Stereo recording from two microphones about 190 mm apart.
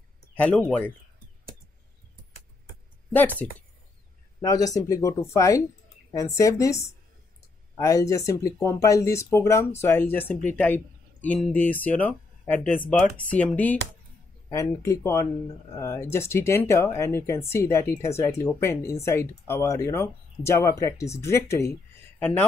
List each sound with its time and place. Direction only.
0.4 s speech: 5° left (ahead or behind)
3.2 s speech: 10° left (ahead or behind)